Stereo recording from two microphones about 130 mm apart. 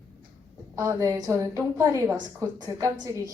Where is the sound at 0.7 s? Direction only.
25° right (ahead or behind).